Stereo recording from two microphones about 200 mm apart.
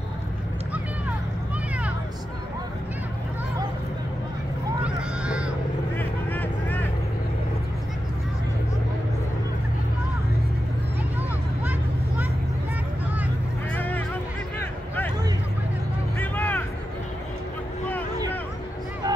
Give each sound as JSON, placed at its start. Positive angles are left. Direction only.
{"t": 4.8, "sound": "a sound", "side_deg": -5}
{"t": 5.9, "sound": "vehicle", "side_deg": 10}
{"t": 13.7, "sound": "music", "side_deg": 10}
{"t": 16.2, "sound": "vehicle", "side_deg": 10}
{"t": 19.0, "sound": "music", "side_deg": -20}